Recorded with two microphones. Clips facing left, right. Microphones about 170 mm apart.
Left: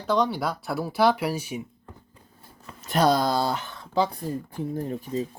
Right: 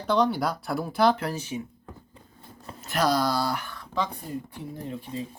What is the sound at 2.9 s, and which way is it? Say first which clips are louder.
Speech: left 3 dB; 25° left (ahead or behind).